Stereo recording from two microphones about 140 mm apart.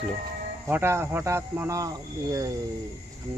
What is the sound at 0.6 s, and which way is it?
A man's voice, 15° right (ahead or behind).